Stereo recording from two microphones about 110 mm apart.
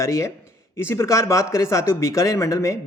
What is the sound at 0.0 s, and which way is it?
Speech, 30° left (ahead or behind).